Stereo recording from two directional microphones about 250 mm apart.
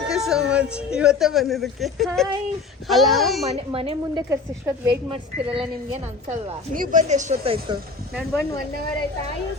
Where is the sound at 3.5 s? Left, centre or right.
Right.